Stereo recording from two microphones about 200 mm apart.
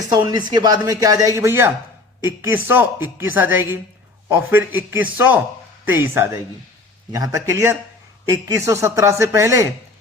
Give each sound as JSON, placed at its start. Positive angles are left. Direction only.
{"t": 0.1, "sound": "speech", "side_deg": -20}